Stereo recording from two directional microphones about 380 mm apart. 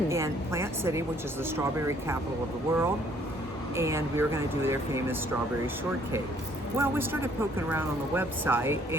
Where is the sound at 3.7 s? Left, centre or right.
Centre.